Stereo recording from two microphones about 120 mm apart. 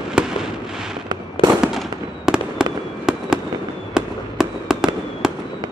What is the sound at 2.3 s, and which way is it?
Fireworks, 5° right (ahead or behind).